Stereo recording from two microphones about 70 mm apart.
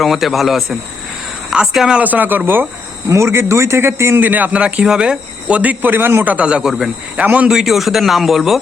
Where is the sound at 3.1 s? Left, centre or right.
Right.